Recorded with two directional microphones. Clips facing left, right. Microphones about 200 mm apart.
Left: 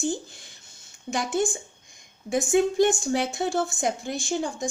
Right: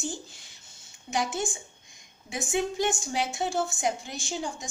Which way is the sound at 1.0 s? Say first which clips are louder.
Left 4 dB; 50° left (ahead or behind).